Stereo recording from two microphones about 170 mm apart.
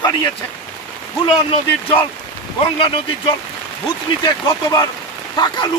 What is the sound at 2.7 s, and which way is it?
Speech, 30° left (ahead or behind).